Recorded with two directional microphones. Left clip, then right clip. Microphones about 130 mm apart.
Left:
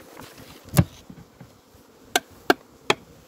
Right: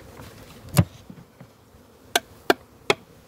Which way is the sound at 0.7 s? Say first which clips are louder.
Even; 15° right (ahead or behind).